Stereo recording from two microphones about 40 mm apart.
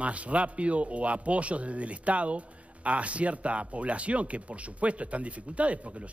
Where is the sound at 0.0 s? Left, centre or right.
Right.